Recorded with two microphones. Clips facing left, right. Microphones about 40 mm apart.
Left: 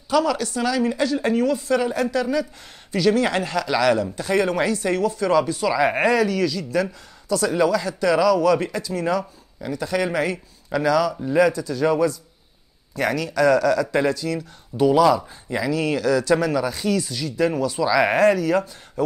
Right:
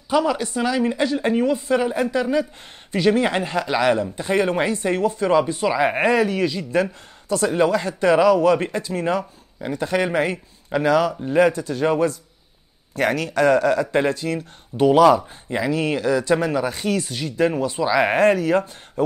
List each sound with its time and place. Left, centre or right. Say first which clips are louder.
0.1 s speech: even; right
15.5 s speech: right 1 dB; right